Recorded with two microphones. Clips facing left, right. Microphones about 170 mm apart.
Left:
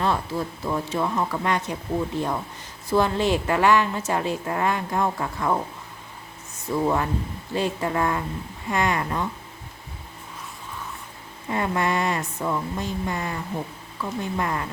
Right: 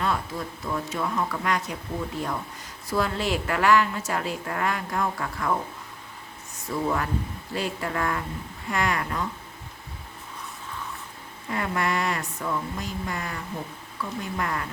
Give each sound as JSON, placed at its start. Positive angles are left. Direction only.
{"t": 0.0, "sound": "a woman's voice", "side_deg": 30}
{"t": 2.9, "sound": "a woman's voice", "side_deg": 25}
{"t": 6.7, "sound": "a woman's voice", "side_deg": 25}
{"t": 11.4, "sound": "a woman's voice", "side_deg": 25}